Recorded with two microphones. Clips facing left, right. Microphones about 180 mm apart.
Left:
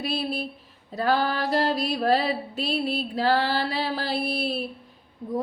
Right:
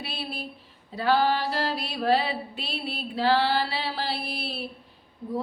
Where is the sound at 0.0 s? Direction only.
45° left (ahead or behind).